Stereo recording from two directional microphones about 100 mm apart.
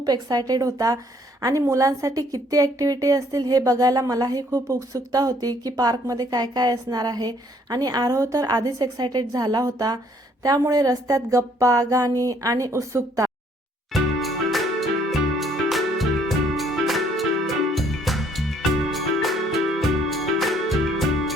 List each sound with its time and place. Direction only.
0.0 s a woman's voice: 40° right (ahead or behind)
13.9 s music: centre (ahead or behind)